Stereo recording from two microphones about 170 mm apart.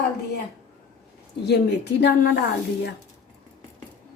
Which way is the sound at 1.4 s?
80° left.